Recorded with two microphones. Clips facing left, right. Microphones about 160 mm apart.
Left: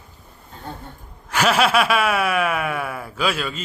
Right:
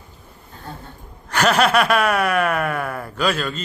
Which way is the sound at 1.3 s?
5° left (ahead or behind).